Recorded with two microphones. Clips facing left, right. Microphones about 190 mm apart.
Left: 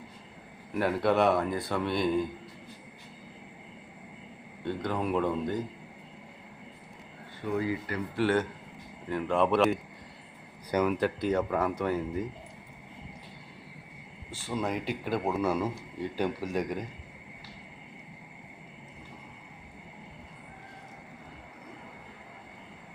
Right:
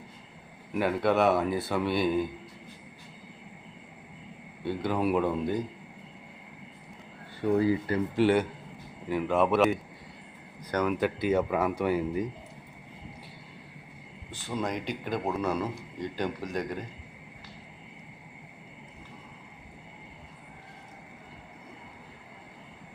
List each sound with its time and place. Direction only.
0.7 s speech: centre (ahead or behind)
4.6 s speech: 5° right (ahead or behind)
7.4 s speech: 35° right (ahead or behind)
8.1 s speech: 15° right (ahead or behind)
9.0 s speech: 5° right (ahead or behind)
14.3 s speech: 5° left (ahead or behind)